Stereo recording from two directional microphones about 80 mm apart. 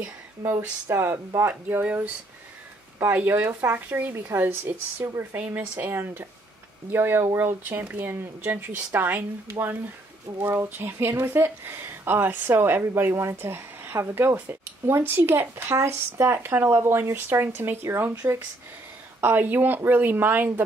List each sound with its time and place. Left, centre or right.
0.5 s speech: right
1.5 s speech: right
19.2 s speech: right